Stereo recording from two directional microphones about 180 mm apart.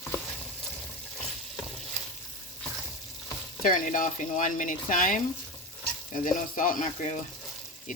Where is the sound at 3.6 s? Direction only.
45° left (ahead or behind).